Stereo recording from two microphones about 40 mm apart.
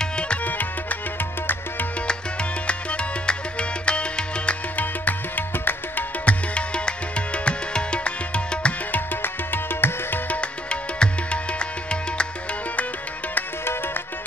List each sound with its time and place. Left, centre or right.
0.5 s music: left
2.6 s music: left
4.7 s music: left
6.2 s music: left
8.9 s music: left
10.3 s music: left